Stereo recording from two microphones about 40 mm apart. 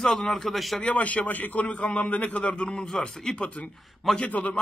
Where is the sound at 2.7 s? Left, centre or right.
Left.